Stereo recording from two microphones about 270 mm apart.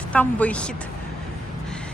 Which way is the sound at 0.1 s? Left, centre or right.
Centre.